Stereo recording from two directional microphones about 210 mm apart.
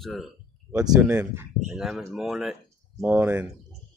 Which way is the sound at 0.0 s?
Centre (ahead or behind).